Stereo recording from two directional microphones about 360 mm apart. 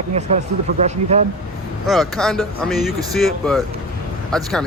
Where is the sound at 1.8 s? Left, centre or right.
Centre.